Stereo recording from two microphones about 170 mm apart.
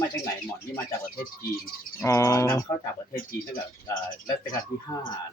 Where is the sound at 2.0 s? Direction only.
15° left (ahead or behind).